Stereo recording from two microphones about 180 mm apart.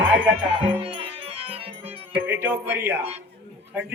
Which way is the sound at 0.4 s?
30° right (ahead or behind).